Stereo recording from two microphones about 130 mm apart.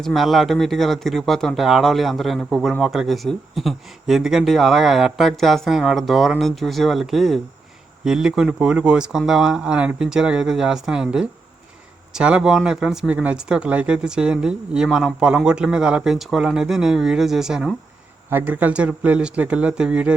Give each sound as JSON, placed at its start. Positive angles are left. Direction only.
{"t": 0.0, "sound": "speech", "side_deg": 0}
{"t": 18.3, "sound": "speech", "side_deg": -15}